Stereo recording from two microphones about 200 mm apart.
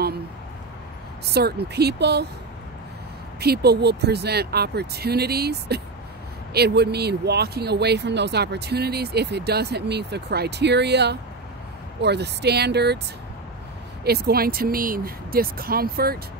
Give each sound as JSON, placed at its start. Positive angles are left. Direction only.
{"t": 1.3, "sound": "speech", "side_deg": -55}
{"t": 3.3, "sound": "speech", "side_deg": -55}
{"t": 14.0, "sound": "speech", "side_deg": -50}